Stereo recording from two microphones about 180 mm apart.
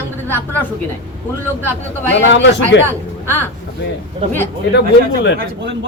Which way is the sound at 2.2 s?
90° left.